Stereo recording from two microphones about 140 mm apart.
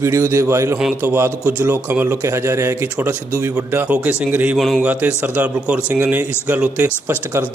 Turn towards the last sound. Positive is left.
turn(degrees=-10)  # may be behind; listen again after turning